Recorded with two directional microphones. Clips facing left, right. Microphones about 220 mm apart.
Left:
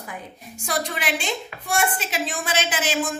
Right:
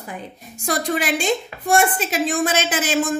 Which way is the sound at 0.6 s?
45° right (ahead or behind).